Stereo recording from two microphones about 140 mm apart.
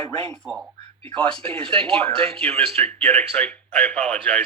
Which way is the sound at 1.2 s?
40° right (ahead or behind).